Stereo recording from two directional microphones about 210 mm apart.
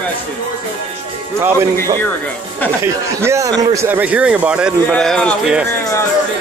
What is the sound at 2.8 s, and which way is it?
A man's voice, 10° right (ahead or behind).